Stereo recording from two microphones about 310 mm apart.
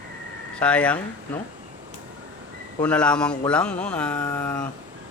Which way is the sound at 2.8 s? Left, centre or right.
Centre.